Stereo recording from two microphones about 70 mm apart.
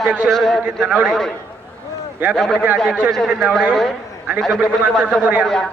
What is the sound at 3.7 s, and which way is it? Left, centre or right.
Speech, centre.